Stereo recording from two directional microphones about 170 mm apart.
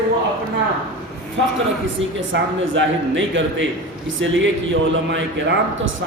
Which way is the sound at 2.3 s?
90° right.